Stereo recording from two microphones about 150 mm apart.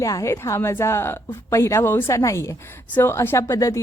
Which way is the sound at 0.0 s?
20° left (ahead or behind).